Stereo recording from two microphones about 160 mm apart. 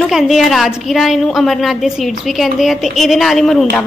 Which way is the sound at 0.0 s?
Centre (ahead or behind).